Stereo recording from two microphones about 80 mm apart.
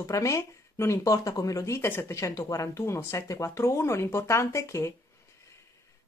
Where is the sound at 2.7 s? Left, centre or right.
Left.